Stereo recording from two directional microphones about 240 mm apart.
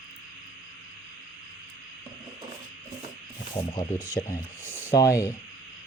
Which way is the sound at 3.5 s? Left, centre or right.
Centre.